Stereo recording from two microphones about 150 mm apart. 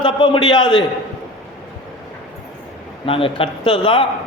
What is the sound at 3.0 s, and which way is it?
A man's voice, 40° left (ahead or behind).